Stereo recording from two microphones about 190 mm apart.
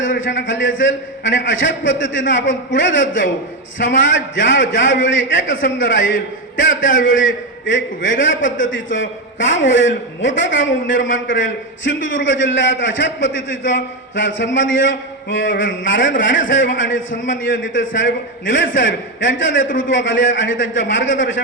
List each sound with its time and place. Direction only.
0.0 s a man's voice: 80° left
6.7 s a man's voice: 45° left (ahead or behind)
7.0 s a man's voice: 85° left
19.6 s a man's voice: 45° left (ahead or behind)
19.9 s a man's voice: 80° left